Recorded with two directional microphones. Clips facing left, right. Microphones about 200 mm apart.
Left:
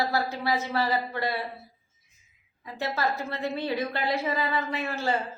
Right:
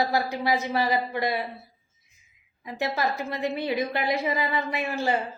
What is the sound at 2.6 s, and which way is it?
A man's voice, 15° right (ahead or behind).